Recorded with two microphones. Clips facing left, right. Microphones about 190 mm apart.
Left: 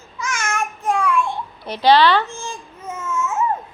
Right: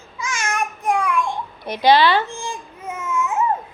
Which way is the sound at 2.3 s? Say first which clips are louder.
Right 2 dB; 15° right (ahead or behind).